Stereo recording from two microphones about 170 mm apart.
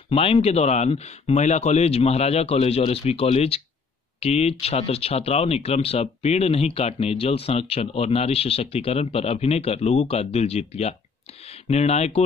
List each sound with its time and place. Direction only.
0.1 s speech: 35° left (ahead or behind)